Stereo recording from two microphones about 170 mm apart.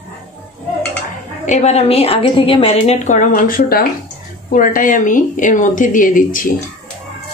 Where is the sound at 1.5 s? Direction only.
40° left (ahead or behind).